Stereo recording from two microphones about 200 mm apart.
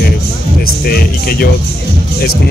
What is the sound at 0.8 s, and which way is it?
Speech, 50° left (ahead or behind).